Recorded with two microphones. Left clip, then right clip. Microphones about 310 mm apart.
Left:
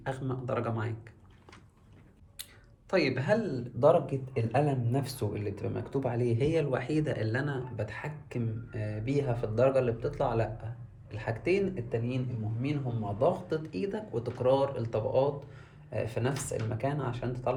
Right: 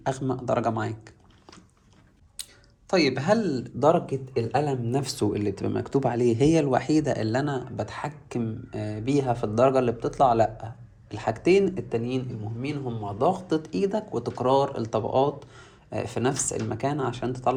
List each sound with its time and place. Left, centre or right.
0.0 s speech: centre
2.4 s clicking: centre
2.9 s speech: centre